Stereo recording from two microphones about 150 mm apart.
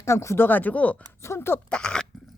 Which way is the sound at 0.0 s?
20° left (ahead or behind).